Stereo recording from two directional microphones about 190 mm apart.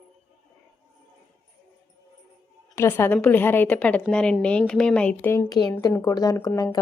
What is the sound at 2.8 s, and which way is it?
A woman's voice, 15° left (ahead or behind).